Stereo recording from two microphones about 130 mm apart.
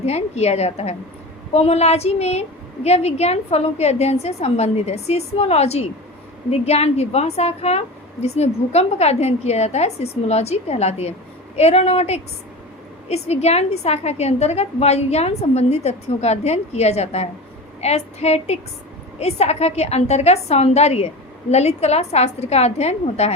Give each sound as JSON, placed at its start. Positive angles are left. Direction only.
{"t": 0.0, "sound": "a woman's voice", "side_deg": 55}